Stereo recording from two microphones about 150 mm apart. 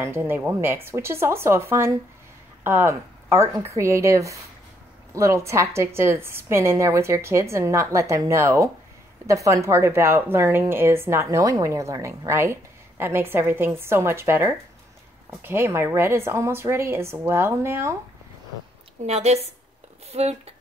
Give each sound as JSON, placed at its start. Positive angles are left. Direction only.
{"t": 0.0, "sound": "a woman's voice", "side_deg": -15}
{"t": 19.0, "sound": "a woman's voice", "side_deg": -45}